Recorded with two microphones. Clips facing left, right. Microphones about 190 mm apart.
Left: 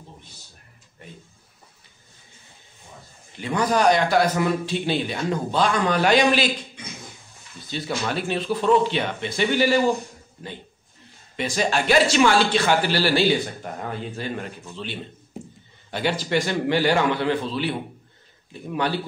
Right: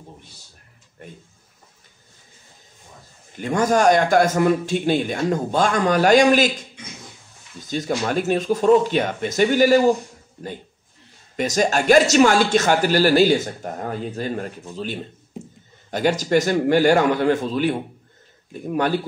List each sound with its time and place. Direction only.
1.0 s a sound: 50° right (ahead or behind)
3.3 s speech: 45° right (ahead or behind)
7.6 s speech: 45° right (ahead or behind)
11.3 s speech: 45° right (ahead or behind)